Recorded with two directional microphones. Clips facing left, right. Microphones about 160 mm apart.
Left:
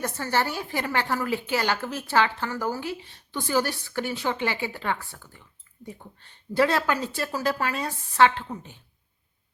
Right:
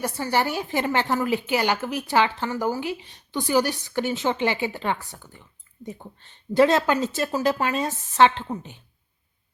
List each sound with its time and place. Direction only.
0.0 s a woman's voice: 10° right (ahead or behind)